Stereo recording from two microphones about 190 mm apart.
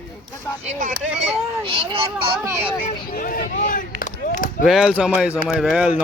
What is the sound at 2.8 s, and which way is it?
Speech, 45° left (ahead or behind).